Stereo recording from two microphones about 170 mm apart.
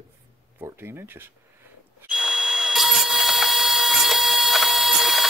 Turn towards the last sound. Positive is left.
turn(degrees=0)  # may be behind; listen again after turning